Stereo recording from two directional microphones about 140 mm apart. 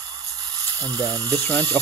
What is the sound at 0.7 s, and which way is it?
Speech, 25° right (ahead or behind).